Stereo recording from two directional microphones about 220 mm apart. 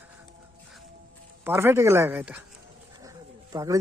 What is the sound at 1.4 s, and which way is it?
A man's voice, 10° right (ahead or behind).